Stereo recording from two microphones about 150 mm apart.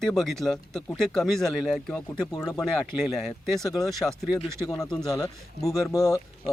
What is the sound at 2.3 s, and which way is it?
Speech, 25° left (ahead or behind).